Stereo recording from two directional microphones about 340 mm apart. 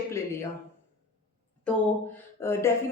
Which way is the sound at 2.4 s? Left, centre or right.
Centre.